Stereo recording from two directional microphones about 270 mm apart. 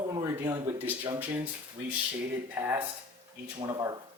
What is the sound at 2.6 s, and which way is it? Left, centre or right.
Speech, centre.